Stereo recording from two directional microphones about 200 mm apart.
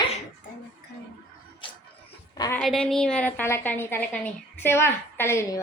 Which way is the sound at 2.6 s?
5° left (ahead or behind).